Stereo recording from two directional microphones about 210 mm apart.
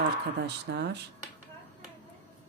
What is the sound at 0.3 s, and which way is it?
Speech, 50° right (ahead or behind).